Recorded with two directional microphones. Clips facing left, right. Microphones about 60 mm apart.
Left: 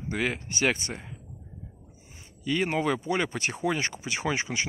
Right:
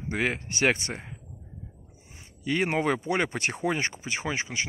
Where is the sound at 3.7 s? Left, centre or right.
Right.